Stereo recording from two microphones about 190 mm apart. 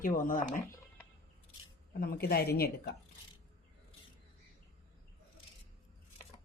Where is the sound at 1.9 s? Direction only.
55° left (ahead or behind).